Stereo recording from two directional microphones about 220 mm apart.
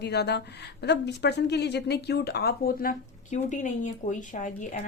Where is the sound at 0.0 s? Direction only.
50° left (ahead or behind).